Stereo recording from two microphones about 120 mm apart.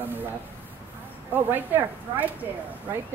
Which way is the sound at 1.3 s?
15° right (ahead or behind).